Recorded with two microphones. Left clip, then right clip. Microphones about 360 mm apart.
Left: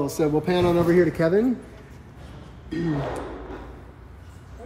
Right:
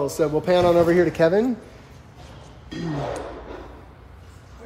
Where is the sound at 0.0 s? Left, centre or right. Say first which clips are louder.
Right 1 dB; centre.